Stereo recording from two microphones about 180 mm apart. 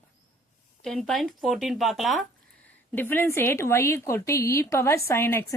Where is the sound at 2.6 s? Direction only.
10° left (ahead or behind).